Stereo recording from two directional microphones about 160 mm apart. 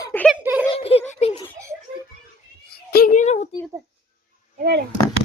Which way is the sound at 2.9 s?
75° left (ahead or behind).